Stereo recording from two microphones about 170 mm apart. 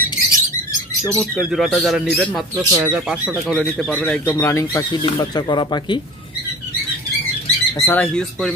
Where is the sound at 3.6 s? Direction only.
5° left (ahead or behind); by 6.0 s 25° left (ahead or behind).